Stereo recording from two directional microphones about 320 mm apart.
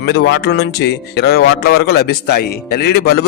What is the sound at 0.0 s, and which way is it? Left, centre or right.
Speech, left.